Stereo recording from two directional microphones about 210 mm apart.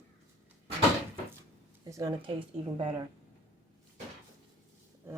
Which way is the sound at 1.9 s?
15° right (ahead or behind).